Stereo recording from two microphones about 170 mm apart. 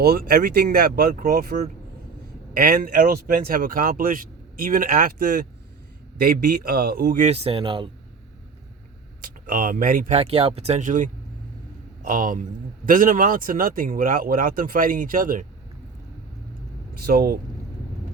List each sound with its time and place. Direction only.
0.0 s speech: 65° right (ahead or behind)
7.3 s speech: 35° right (ahead or behind)
9.2 s speech: 55° right (ahead or behind)
10.2 s a man's voice: 35° right (ahead or behind); by 15.4 s 55° right (ahead or behind)
17.0 s speech: 60° right (ahead or behind)